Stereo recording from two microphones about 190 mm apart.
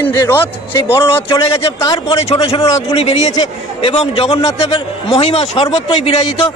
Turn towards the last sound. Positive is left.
turn(degrees=30)  # may be behind; listen again after turning